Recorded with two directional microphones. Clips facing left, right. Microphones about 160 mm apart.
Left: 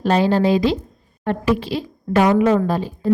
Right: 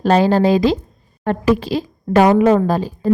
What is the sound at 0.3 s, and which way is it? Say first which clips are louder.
A woman's voice: right 3 dB; 40° right (ahead or behind).